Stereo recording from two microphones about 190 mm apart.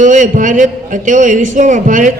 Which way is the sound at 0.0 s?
40° right (ahead or behind).